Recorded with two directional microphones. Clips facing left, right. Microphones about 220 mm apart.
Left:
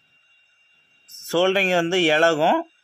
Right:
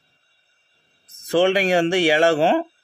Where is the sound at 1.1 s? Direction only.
15° right (ahead or behind).